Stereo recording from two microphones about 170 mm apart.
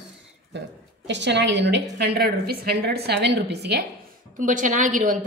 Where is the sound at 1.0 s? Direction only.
90° right.